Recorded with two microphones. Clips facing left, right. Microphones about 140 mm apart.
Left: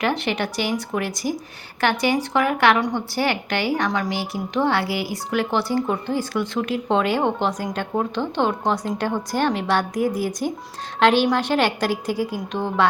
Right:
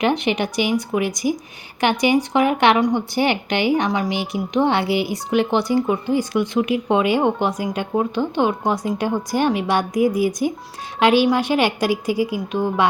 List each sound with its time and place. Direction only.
0.0 s a woman's voice: 15° right (ahead or behind)